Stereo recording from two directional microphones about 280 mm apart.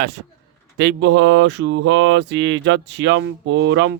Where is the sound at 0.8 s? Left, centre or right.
Right.